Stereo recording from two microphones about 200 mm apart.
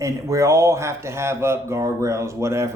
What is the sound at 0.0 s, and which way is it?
Speech, 15° right (ahead or behind).